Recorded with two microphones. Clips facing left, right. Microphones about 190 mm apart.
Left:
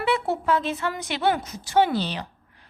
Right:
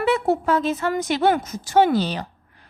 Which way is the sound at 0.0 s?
45° right (ahead or behind).